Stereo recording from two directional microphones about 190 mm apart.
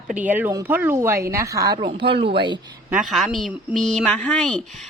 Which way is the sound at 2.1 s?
30° right (ahead or behind).